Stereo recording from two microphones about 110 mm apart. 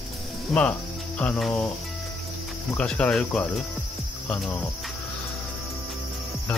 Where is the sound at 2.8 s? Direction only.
10° left (ahead or behind).